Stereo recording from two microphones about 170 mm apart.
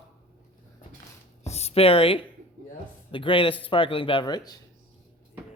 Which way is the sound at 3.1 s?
30° left (ahead or behind).